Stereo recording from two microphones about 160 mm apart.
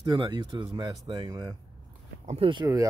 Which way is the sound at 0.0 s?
30° right (ahead or behind).